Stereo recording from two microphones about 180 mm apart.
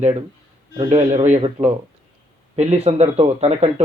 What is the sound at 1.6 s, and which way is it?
Speech, 15° right (ahead or behind).